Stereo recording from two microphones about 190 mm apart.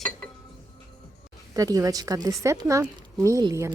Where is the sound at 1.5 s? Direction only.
20° right (ahead or behind).